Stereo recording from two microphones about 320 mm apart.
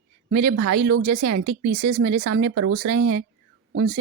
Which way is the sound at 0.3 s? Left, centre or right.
Right.